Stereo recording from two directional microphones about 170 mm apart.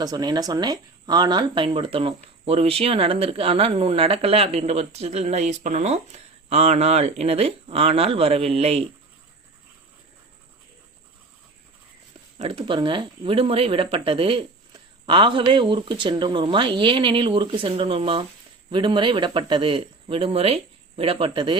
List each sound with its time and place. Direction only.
0.0 s speech: 25° right (ahead or behind)
12.5 s speech: 30° right (ahead or behind)